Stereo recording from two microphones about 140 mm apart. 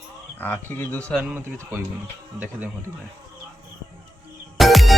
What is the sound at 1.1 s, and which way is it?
Speech, 10° right (ahead or behind).